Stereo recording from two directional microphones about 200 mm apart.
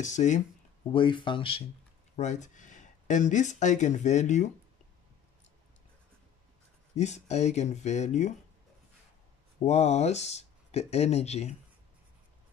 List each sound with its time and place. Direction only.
0.0 s speech: 35° left (ahead or behind)
0.9 s speech: 25° left (ahead or behind)
2.1 s speech: 35° left (ahead or behind)
7.0 s speech: 35° left (ahead or behind)
9.7 s speech: 35° left (ahead or behind)